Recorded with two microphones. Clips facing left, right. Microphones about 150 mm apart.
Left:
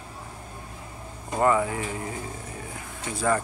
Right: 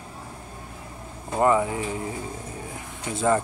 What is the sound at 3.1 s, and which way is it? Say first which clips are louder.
Speech: right 3 dB; 20° right (ahead or behind).